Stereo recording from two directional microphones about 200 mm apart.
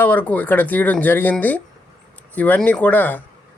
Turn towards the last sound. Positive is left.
turn(degrees=10)  # may be behind; listen again after turning